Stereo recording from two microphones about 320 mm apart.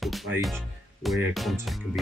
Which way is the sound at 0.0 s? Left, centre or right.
Centre.